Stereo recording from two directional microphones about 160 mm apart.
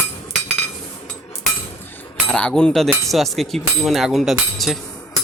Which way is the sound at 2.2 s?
5° left (ahead or behind).